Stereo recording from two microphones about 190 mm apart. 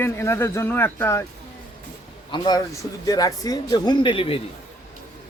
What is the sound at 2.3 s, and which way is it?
Speech, 25° left (ahead or behind).